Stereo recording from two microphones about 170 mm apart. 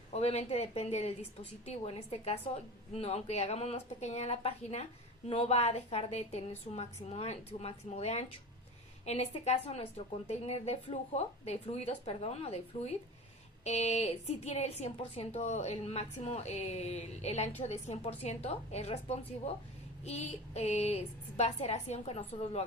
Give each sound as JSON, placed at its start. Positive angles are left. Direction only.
{"t": 0.1, "sound": "a woman's voice", "side_deg": 40}